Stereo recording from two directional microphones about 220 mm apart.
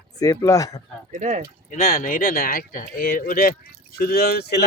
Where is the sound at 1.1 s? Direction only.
35° right (ahead or behind).